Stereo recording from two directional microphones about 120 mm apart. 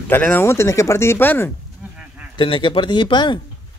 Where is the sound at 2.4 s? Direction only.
45° left (ahead or behind).